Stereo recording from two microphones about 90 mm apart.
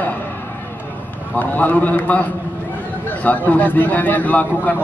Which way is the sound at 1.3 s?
20° left (ahead or behind).